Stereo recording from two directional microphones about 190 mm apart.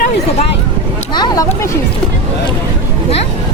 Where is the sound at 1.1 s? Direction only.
20° left (ahead or behind).